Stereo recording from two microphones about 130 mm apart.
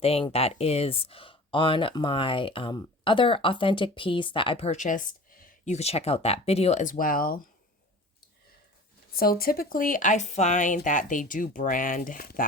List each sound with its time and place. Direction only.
0.0 s speech: 50° left (ahead or behind); by 7.3 s 90° left
9.5 s speech: 90° left